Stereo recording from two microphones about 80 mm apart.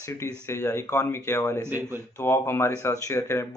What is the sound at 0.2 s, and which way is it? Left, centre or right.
A man's voice, left.